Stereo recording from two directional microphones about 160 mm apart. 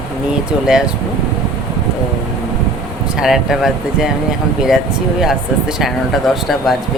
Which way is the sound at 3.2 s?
5° right (ahead or behind).